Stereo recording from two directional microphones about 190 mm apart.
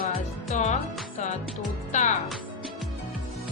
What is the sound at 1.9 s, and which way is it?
Speech, 40° left (ahead or behind).